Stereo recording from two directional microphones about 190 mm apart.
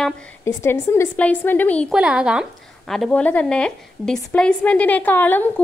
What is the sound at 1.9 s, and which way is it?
A woman's voice, 5° right (ahead or behind).